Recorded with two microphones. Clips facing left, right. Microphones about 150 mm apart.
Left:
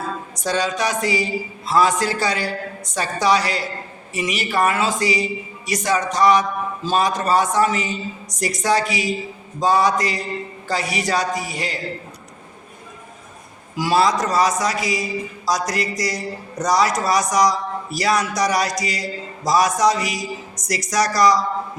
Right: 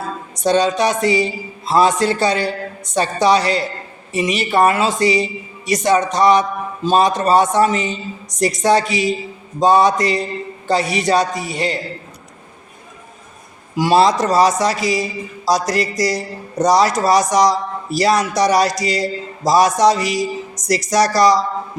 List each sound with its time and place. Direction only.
0.3 s speech: 25° right (ahead or behind)
13.7 s speech: 25° right (ahead or behind)